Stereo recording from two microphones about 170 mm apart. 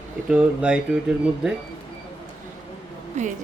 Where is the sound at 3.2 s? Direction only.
45° right (ahead or behind).